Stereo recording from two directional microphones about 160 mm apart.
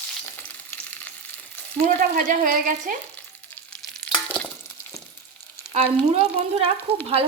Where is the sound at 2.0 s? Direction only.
55° right (ahead or behind).